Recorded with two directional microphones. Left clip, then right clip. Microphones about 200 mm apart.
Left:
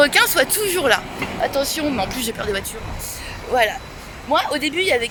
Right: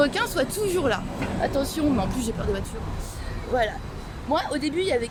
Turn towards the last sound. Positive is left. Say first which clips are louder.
# left 6 dB
turn(degrees=15)  # may be behind; listen again after turning